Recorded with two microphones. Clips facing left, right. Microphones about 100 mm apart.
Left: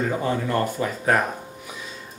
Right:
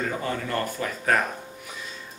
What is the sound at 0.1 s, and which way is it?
Speech, 20° left (ahead or behind).